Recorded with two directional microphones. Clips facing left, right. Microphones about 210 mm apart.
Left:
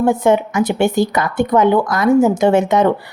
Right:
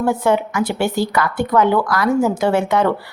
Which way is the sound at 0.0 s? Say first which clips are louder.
Left 3 dB; 20° left (ahead or behind).